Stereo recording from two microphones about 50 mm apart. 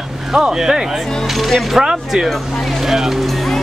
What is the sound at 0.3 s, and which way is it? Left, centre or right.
Speech, centre.